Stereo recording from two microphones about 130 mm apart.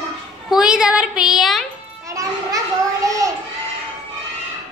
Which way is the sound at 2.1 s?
25° right (ahead or behind).